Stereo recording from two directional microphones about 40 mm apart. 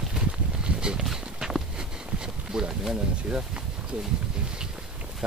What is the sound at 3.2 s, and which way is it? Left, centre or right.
Speech, right.